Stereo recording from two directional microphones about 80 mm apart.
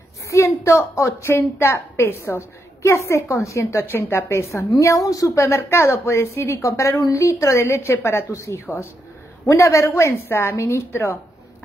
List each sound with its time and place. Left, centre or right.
0.3 s a woman's voice: left
3.8 s a woman's voice: left
9.5 s a woman's voice: left